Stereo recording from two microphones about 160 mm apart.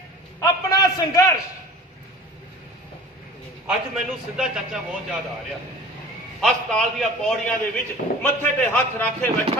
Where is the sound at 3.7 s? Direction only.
5° right (ahead or behind).